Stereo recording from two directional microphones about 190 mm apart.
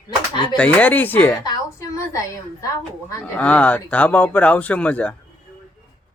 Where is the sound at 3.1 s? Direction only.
15° left (ahead or behind).